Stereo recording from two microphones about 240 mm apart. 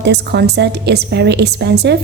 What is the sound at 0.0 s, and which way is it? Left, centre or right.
A woman's voice, right.